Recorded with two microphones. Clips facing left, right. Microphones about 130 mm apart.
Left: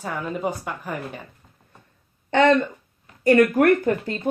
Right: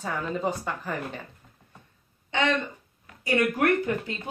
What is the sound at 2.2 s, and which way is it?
Speech, 50° left (ahead or behind).